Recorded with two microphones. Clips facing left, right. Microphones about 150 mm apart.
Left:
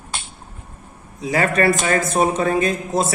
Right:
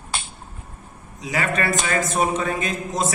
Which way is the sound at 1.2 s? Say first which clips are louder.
Left 6 dB; 40° left (ahead or behind).